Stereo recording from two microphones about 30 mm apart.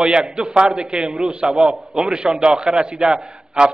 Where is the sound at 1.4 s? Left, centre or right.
Centre.